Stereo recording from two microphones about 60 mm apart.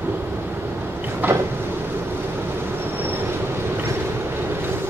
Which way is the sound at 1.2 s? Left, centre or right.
Right.